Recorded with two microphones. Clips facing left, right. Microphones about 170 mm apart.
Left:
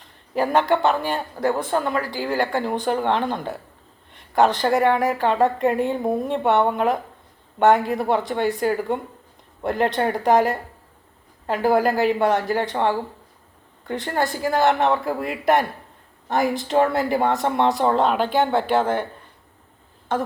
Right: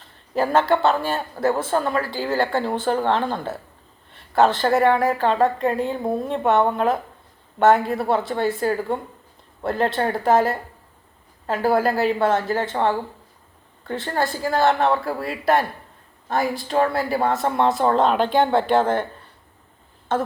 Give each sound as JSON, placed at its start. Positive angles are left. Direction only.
{"t": 0.0, "sound": "speech", "side_deg": 15}
{"t": 20.1, "sound": "speech", "side_deg": 10}